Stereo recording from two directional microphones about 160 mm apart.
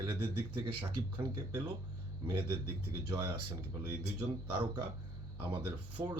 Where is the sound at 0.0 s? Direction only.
30° right (ahead or behind).